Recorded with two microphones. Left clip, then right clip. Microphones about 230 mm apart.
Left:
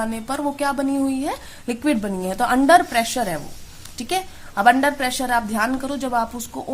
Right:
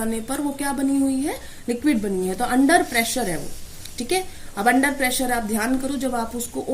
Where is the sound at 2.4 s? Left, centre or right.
Left.